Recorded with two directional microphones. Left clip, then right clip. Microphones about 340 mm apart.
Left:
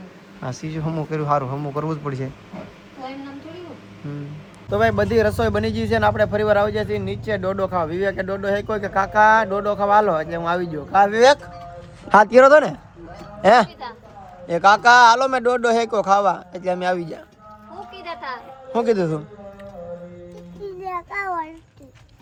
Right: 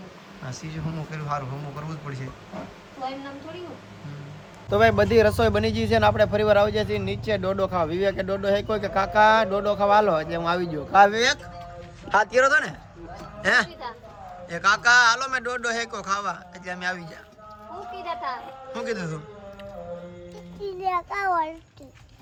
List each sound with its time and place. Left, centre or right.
0.4 s speech: centre
4.7 s speech: centre
12.0 s a man's voice: centre
18.0 s a sound: centre
18.7 s a man's voice: centre
20.8 s a child's voice: centre